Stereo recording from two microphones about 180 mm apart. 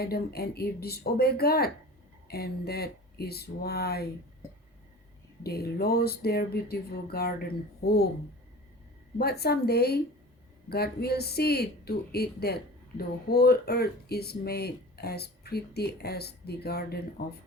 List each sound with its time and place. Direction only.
0.0 s speech: 60° left (ahead or behind)
5.4 s speech: 60° left (ahead or behind)
9.1 s speech: 60° left (ahead or behind)